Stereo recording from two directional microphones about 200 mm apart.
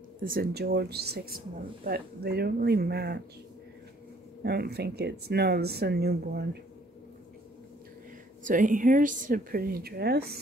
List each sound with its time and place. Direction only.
0.2 s speech: 45° right (ahead or behind)
4.4 s speech: 55° right (ahead or behind)
8.5 s speech: 40° right (ahead or behind)